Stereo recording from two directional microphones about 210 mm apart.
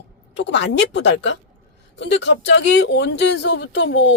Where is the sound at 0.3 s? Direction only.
55° left (ahead or behind).